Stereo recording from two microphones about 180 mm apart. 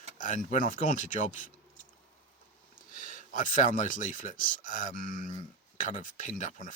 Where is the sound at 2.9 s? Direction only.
50° left (ahead or behind).